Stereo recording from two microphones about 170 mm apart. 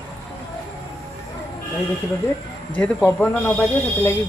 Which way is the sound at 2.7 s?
10° left (ahead or behind).